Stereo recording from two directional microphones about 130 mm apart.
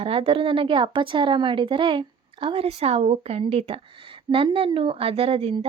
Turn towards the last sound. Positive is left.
turn(degrees=-50)  # may be behind; listen again after turning